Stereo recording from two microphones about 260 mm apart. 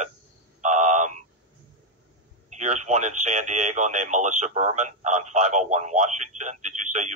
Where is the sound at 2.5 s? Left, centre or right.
Right.